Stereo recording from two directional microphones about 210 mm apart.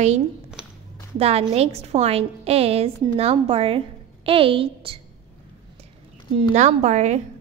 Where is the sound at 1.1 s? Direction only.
30° right (ahead or behind).